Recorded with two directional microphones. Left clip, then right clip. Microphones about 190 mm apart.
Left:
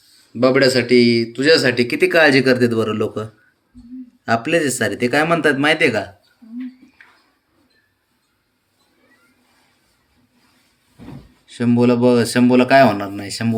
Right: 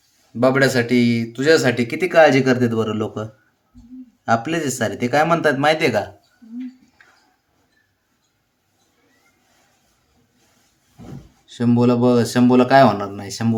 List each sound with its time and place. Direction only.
0.3 s speech: 30° right (ahead or behind)
4.3 s speech: 15° right (ahead or behind)
11.4 s speech: 20° right (ahead or behind)